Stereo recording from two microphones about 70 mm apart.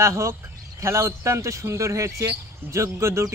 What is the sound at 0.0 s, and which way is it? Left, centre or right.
Speech, right.